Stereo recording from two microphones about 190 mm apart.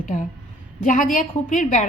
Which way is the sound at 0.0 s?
40° left (ahead or behind).